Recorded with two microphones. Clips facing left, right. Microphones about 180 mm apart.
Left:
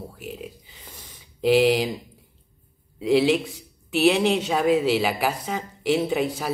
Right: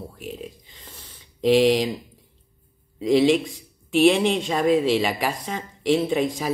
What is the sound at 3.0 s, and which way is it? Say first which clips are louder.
Speech: right 2 dB; 5° left (ahead or behind).